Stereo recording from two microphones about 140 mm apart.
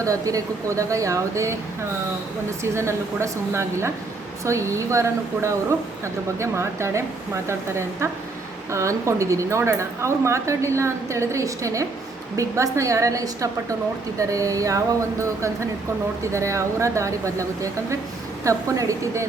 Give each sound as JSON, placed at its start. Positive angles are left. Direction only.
{"t": 0.0, "sound": "a woman's voice", "side_deg": -25}
{"t": 2.7, "sound": "a woman's voice", "side_deg": -20}
{"t": 16.3, "sound": "a woman's voice", "side_deg": -20}